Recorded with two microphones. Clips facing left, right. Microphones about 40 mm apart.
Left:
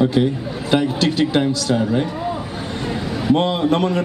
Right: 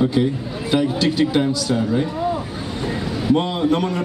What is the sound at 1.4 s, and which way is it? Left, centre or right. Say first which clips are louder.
Speech: left 1 dB; centre.